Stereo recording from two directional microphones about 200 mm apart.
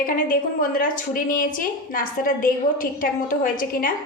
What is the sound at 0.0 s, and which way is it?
A woman's voice, 45° left (ahead or behind).